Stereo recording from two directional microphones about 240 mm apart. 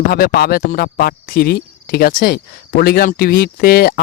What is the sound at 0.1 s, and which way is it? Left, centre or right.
Speech, left.